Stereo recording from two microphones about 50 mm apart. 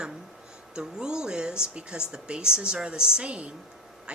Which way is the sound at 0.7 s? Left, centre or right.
Centre.